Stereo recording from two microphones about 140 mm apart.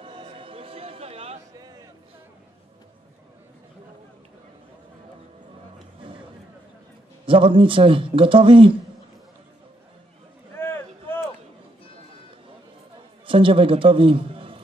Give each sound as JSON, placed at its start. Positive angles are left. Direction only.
{"t": 0.0, "sound": "choir", "side_deg": -40}
{"t": 7.2, "sound": "a man's voice", "side_deg": -40}
{"t": 10.5, "sound": "a sound", "side_deg": 15}
{"t": 13.3, "sound": "a man's voice", "side_deg": -40}